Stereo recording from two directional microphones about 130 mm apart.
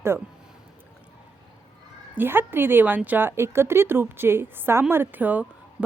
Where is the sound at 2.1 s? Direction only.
15° right (ahead or behind).